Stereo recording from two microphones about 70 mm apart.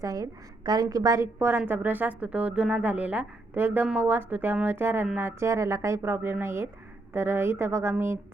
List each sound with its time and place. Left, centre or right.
0.0 s a woman's voice: right
1.2 s a woman's voice: right
5.5 s speech: right